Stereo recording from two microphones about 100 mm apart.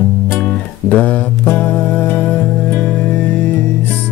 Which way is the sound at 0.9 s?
15° left (ahead or behind).